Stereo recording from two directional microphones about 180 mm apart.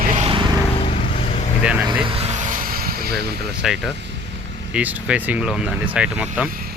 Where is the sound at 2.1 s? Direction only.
35° right (ahead or behind); by 3.3 s 55° right (ahead or behind).